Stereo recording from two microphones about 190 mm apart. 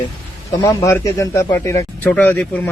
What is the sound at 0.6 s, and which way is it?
Speech, 15° left (ahead or behind).